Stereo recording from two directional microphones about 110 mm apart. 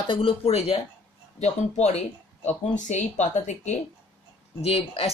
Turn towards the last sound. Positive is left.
turn(degrees=65)  # may be behind; listen again after turning